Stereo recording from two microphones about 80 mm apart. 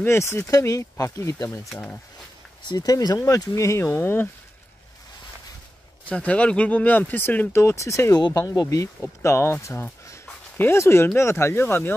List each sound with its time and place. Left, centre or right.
0.0 s speech: left
2.7 s speech: left
4.0 s speech: left
6.0 s speech: centre; by 8.2 s left
8.5 s speech: left
9.0 s speech: left